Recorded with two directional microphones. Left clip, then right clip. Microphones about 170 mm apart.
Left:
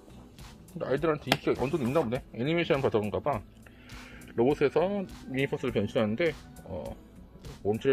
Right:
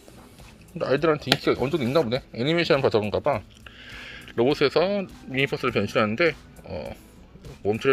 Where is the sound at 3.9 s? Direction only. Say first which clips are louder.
Right 8 dB; centre (ahead or behind).